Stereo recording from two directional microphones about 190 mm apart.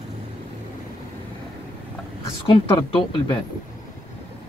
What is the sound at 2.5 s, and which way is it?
Speech, 25° left (ahead or behind).